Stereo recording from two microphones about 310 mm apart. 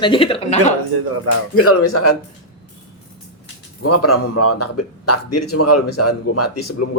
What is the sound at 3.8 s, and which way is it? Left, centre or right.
Speech, left.